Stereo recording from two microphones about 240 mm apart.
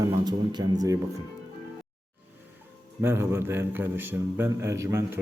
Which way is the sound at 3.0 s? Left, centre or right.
Centre.